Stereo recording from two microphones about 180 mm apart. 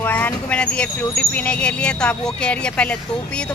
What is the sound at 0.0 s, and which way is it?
Speech, 10° left (ahead or behind).